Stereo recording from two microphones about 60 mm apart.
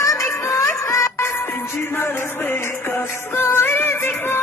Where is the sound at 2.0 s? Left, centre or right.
Left.